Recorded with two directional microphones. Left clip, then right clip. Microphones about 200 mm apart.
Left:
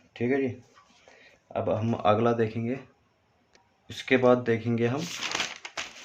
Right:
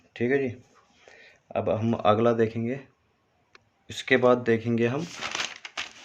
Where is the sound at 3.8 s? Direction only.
30° right (ahead or behind).